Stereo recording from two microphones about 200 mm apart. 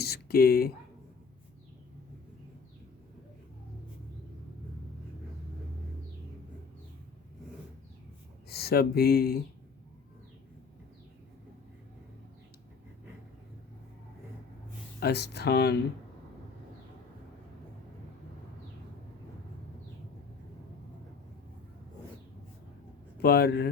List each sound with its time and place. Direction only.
0.0 s a sound: 50° left (ahead or behind)
8.4 s speech: 50° left (ahead or behind)
15.0 s speech: 55° left (ahead or behind)
23.2 s speech: 50° left (ahead or behind)